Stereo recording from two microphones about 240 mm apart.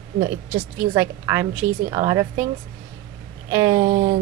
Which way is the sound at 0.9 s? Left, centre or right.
Centre.